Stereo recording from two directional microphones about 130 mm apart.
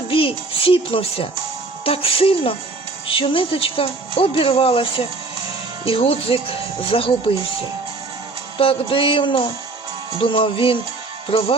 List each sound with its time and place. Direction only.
0.1 s music: 45° left (ahead or behind)
1.8 s speech: 45° left (ahead or behind)
8.5 s speech: 45° left (ahead or behind)